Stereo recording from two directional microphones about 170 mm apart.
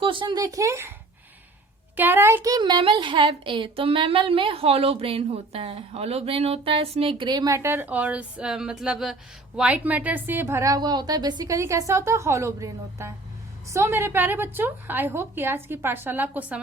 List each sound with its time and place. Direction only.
0.0 s a woman's voice: 30° right (ahead or behind)
2.0 s a woman's voice: 10° right (ahead or behind)